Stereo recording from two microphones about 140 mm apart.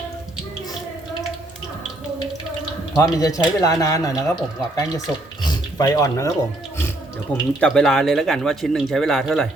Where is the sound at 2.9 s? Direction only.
25° left (ahead or behind).